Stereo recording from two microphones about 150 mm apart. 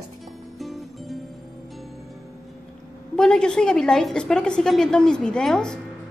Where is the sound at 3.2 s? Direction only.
5° left (ahead or behind).